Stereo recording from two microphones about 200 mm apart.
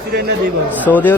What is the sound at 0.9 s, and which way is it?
Speech, 10° left (ahead or behind).